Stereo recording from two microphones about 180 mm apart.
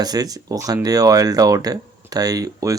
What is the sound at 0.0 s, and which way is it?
Speech, 20° right (ahead or behind).